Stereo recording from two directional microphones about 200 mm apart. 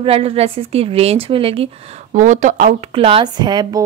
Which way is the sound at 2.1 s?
40° right (ahead or behind).